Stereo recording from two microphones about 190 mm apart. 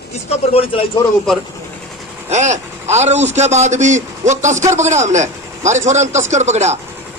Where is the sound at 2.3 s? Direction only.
35° right (ahead or behind).